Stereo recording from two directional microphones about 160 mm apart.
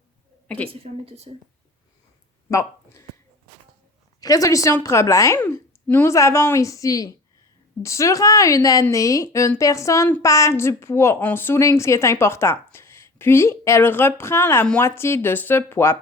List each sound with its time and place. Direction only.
0.4 s a woman's voice: 10° left (ahead or behind)
0.7 s a woman's voice: 40° right (ahead or behind)
2.5 s speech: 15° left (ahead or behind)
4.2 s a woman's voice: 20° left (ahead or behind)